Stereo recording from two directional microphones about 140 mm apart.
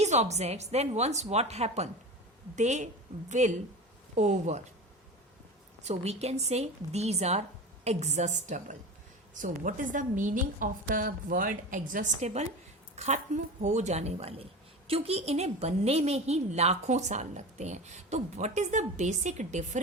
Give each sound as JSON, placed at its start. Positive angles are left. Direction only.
{"t": 0.0, "sound": "a woman's voice", "side_deg": -55}
{"t": 5.8, "sound": "a woman's voice", "side_deg": -50}
{"t": 13.0, "sound": "a woman's voice", "side_deg": -55}